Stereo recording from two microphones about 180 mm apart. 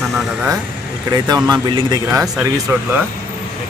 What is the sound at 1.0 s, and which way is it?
Speech, 25° right (ahead or behind).